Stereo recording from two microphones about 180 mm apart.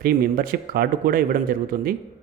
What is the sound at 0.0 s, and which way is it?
Speech, 55° right (ahead or behind).